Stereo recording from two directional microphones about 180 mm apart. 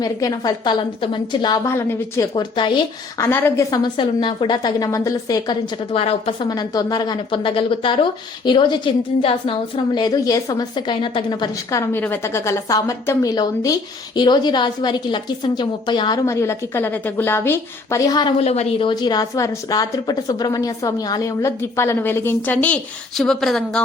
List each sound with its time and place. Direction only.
0.0 s a woman's voice: 20° left (ahead or behind)
1.6 s a woman's voice: 15° left (ahead or behind)
2.3 s a woman's voice: 25° left (ahead or behind)
3.2 s a woman's voice: 15° left (ahead or behind)
5.9 s a woman's voice: 35° left (ahead or behind); by 23.8 s centre (ahead or behind)